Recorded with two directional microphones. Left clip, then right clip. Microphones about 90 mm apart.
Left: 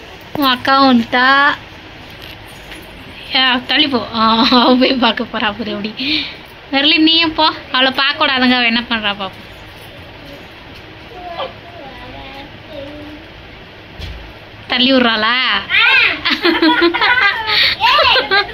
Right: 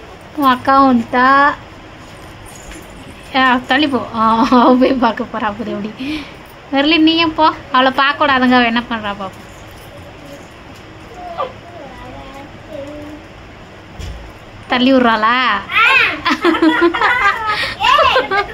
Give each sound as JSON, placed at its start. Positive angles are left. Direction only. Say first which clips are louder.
{"t": 0.4, "sound": "speech", "louder": "right 1 dB", "side_deg": -10}
{"t": 3.3, "sound": "a woman's voice", "louder": "right 1 dB", "side_deg": -10}
{"t": 14.7, "sound": "a woman's voice", "louder": "even", "side_deg": -20}